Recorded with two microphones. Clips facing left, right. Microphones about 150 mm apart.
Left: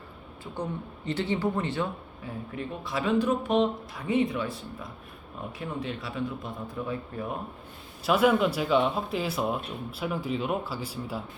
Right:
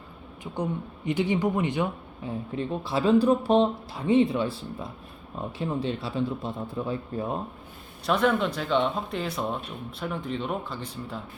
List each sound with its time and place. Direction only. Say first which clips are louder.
0.5 s a man's voice: right 4 dB; 15° right (ahead or behind)
2.6 s speech: right 5 dB; 30° right (ahead or behind)
8.0 s speech: left 1 dB; 5° left (ahead or behind)